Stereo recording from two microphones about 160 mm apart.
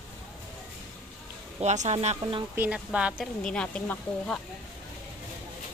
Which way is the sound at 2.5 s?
10° right (ahead or behind).